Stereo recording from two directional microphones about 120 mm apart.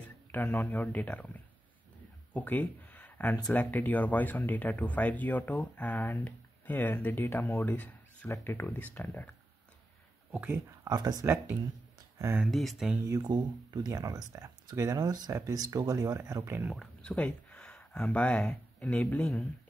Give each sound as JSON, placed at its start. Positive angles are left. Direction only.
{"t": 0.3, "sound": "speech", "side_deg": 15}
{"t": 10.3, "sound": "speech", "side_deg": -15}
{"t": 10.9, "sound": "speech", "side_deg": -35}
{"t": 12.4, "sound": "speech", "side_deg": 0}
{"t": 13.0, "sound": "speech", "side_deg": -25}
{"t": 16.7, "sound": "speech", "side_deg": 5}